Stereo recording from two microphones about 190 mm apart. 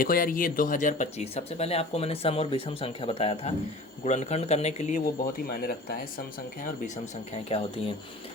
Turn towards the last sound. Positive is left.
turn(degrees=30)  # may be behind; listen again after turning